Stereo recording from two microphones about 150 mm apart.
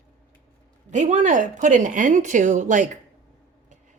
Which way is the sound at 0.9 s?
55° right (ahead or behind).